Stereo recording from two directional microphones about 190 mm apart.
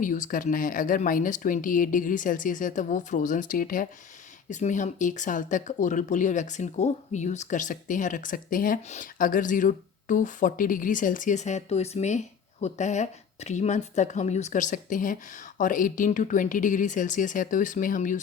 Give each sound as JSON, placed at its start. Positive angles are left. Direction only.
{"t": 0.0, "sound": "speech", "side_deg": 45}